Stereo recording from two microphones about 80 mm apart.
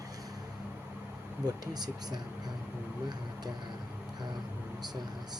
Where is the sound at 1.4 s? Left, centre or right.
Right.